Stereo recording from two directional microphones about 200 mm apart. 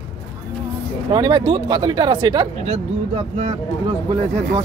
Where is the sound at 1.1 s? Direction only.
20° right (ahead or behind).